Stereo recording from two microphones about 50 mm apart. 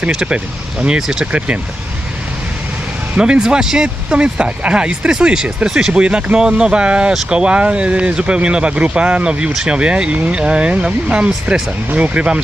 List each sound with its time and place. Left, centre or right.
0.1 s speech: centre
3.2 s speech: centre